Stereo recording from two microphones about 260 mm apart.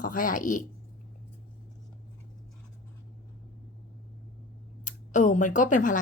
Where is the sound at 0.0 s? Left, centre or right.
Left.